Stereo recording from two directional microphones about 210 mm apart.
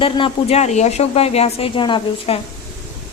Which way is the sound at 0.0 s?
25° left (ahead or behind).